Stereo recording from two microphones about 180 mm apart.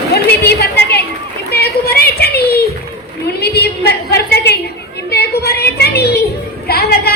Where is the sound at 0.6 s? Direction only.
60° left (ahead or behind).